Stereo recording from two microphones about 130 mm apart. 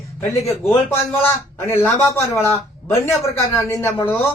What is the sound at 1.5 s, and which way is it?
Speech, 20° left (ahead or behind).